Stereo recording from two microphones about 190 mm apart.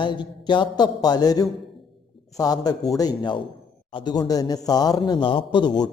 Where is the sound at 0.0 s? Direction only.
25° left (ahead or behind).